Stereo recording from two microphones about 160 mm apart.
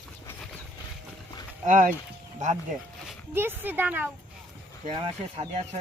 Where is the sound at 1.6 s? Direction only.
55° right (ahead or behind).